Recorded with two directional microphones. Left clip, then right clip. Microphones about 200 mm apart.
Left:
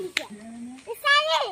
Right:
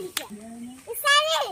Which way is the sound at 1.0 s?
45° left (ahead or behind).